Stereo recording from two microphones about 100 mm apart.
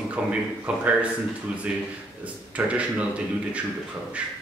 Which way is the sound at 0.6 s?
20° right (ahead or behind).